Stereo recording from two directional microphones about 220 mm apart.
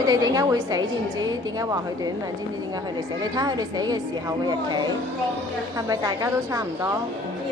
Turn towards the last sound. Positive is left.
turn(degrees=-15)  # may be behind; listen again after turning